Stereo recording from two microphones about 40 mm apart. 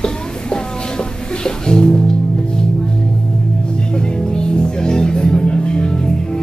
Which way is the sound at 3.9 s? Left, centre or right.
Left.